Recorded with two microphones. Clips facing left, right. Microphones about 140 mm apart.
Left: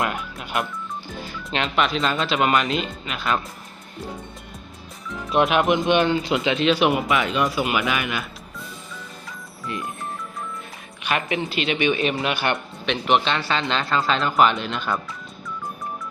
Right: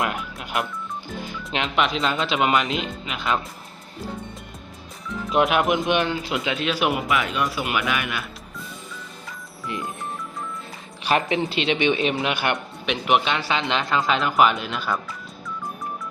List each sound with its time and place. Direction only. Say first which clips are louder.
0.0 s speech: even; centre (ahead or behind)
1.5 s speech: left 1 dB; 15° right (ahead or behind)
5.4 s speech: left 1 dB; 5° right (ahead or behind)
9.6 s speech: even; 20° right (ahead or behind)
11.0 s speech: right 3 dB; 30° right (ahead or behind)
14.2 s speech: left 1 dB; 5° right (ahead or behind)